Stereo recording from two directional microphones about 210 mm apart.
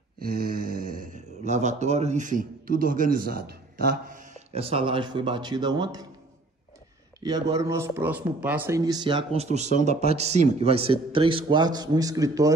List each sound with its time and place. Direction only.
0.3 s speech: 45° right (ahead or behind); by 6.0 s 20° right (ahead or behind)
7.2 s speech: 20° right (ahead or behind)